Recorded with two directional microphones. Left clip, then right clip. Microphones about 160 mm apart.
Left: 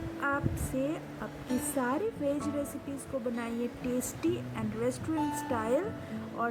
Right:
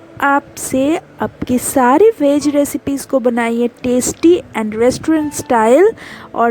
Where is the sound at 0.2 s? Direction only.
60° right (ahead or behind).